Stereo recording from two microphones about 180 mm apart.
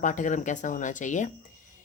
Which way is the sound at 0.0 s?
45° left (ahead or behind).